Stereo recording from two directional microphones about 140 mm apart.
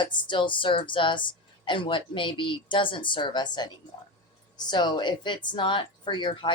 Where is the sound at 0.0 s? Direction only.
35° left (ahead or behind).